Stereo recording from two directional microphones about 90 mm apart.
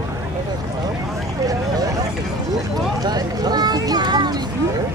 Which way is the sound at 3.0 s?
50° right (ahead or behind).